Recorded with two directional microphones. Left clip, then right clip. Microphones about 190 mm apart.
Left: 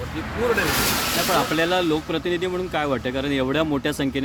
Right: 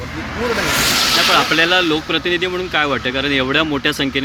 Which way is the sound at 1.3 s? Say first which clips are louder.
Right 7 dB; 15° left (ahead or behind).